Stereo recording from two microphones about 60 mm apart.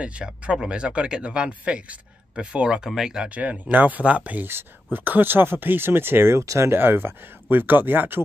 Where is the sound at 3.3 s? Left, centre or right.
Right.